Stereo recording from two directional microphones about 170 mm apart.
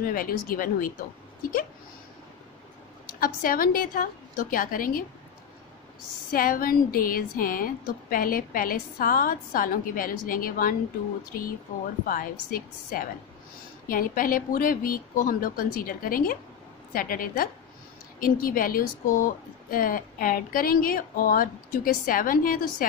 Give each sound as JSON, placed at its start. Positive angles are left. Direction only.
{"t": 0.0, "sound": "speech", "side_deg": 55}
{"t": 3.2, "sound": "speech", "side_deg": 55}
{"t": 6.3, "sound": "speech", "side_deg": 55}
{"t": 12.1, "sound": "speech", "side_deg": 55}